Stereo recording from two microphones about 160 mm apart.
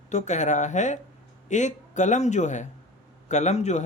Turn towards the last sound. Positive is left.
turn(degrees=45)  # may be behind; listen again after turning